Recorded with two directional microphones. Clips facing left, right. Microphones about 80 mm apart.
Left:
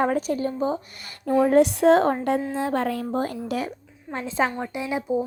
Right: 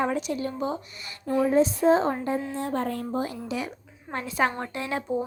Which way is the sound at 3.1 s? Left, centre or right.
Left.